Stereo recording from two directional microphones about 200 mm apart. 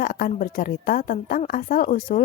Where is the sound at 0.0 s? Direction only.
45° left (ahead or behind).